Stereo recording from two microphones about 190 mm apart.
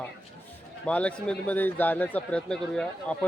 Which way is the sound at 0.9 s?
5° left (ahead or behind).